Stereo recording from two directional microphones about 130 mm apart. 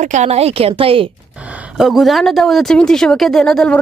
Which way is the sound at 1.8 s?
Centre (ahead or behind).